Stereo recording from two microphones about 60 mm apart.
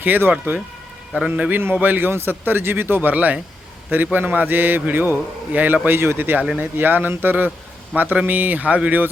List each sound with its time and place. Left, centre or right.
0.0 s a man's voice: right